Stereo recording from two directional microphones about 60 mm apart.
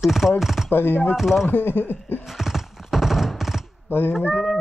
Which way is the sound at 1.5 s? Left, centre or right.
Left.